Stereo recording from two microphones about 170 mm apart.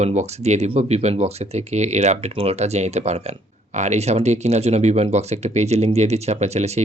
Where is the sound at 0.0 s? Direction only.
40° right (ahead or behind).